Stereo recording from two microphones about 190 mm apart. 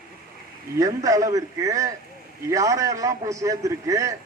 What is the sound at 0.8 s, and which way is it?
A man's voice, 15° right (ahead or behind).